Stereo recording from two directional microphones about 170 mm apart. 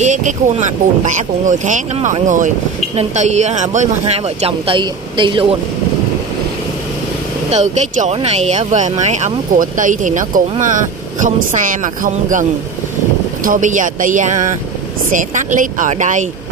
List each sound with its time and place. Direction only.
0.0 s speech: 45° right (ahead or behind); by 5.6 s 30° right (ahead or behind)
7.5 s speech: 45° right (ahead or behind)